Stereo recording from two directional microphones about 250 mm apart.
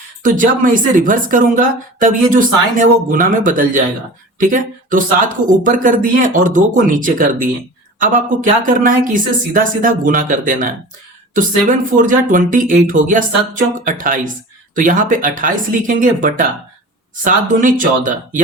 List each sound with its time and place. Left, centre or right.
0.2 s speech: right
8.4 s speech: right